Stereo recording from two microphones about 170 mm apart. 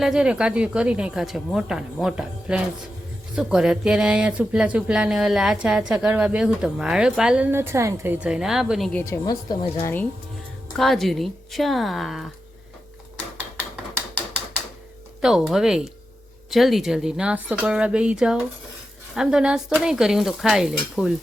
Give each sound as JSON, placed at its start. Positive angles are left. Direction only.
{"t": 0.0, "sound": "speech", "side_deg": -5}
{"t": 8.9, "sound": "a woman's voice", "side_deg": 10}
{"t": 9.2, "sound": "a woman's voice", "side_deg": 25}
{"t": 9.8, "sound": "a woman's voice", "side_deg": 10}
{"t": 15.2, "sound": "speech", "side_deg": -5}